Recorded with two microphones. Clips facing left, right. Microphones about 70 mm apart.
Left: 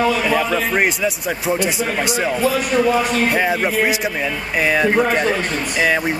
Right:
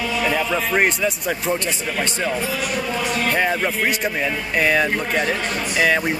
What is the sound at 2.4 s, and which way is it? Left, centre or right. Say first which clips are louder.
Speech: left 8 dB; left.